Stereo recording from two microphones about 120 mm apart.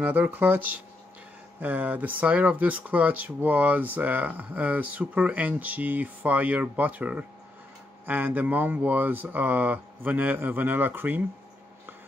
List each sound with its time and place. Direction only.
0.0 s speech: 15° right (ahead or behind)